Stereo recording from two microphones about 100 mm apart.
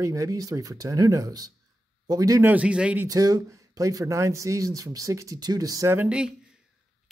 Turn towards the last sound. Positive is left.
turn(degrees=-10)  # may be behind; listen again after turning